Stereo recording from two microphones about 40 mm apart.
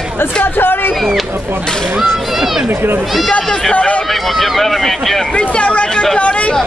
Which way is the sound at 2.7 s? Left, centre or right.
Right.